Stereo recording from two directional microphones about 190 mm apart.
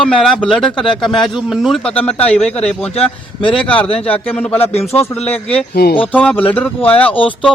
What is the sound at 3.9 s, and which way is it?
Speech, 30° left (ahead or behind).